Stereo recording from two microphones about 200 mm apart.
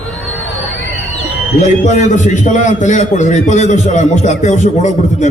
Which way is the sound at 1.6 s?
35° left (ahead or behind).